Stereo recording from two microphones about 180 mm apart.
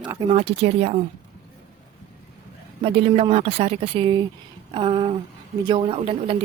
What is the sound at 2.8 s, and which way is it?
A woman's voice, 30° right (ahead or behind).